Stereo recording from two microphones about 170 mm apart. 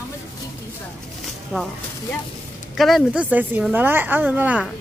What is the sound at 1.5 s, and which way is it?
Speech, 5° right (ahead or behind).